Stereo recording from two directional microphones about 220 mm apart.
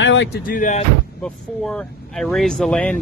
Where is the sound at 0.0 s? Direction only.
55° left (ahead or behind).